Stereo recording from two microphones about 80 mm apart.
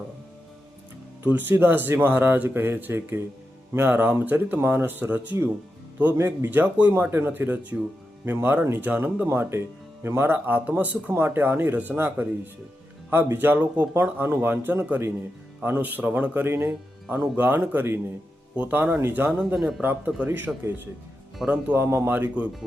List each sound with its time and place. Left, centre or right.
1.2 s speech: right
21.8 s speech: right